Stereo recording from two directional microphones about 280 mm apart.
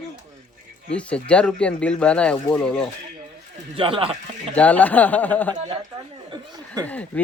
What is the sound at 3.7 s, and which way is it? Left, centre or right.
Speech, centre.